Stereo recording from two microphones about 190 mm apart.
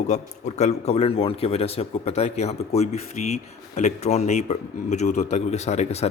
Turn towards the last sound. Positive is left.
turn(degrees=35)  # may be behind; listen again after turning